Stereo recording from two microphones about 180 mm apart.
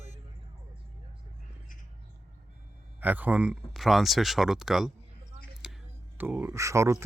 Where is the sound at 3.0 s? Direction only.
10° right (ahead or behind).